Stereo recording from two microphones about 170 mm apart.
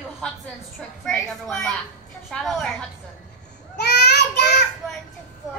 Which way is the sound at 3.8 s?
80° left.